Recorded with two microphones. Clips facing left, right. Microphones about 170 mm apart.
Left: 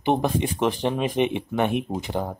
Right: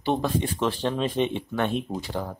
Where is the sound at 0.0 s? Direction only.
20° left (ahead or behind).